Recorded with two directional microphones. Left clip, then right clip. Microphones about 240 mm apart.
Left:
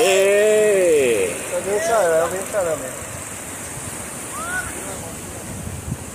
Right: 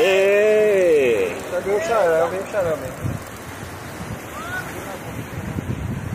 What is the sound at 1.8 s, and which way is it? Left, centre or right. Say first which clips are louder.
Speech: left 1 dB; centre.